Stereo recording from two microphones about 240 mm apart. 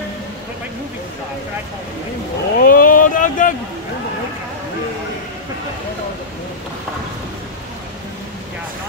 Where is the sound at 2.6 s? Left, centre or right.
Left.